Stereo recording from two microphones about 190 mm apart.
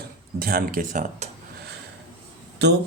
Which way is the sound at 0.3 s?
50° right (ahead or behind).